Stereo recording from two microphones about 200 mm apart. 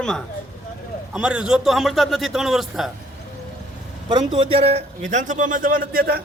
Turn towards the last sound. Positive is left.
turn(degrees=-50)  # may be behind; listen again after turning